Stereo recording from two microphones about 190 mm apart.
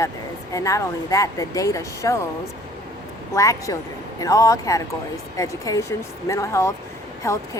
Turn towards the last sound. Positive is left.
turn(degrees=15)  # may be behind; listen again after turning